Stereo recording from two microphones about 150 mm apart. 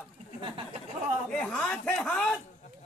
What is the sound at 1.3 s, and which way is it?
Speech, 5° left (ahead or behind).